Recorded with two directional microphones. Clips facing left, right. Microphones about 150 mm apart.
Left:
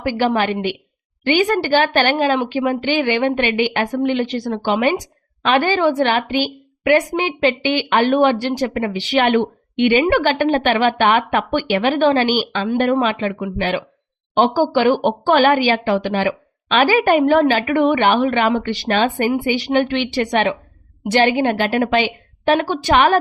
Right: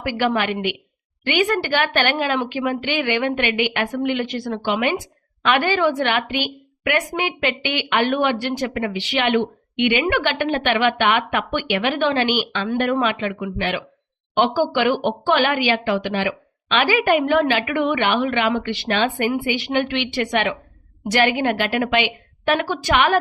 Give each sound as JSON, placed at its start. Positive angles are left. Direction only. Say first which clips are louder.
{"t": 0.0, "sound": "a woman's voice", "louder": "left 3 dB", "side_deg": 30}